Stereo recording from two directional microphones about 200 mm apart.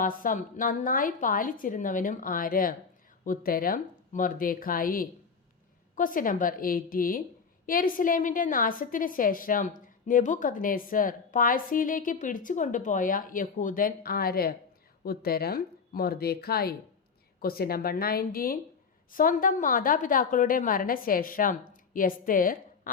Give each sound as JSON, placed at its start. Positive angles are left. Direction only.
{"t": 0.0, "sound": "a woman's voice", "side_deg": 40}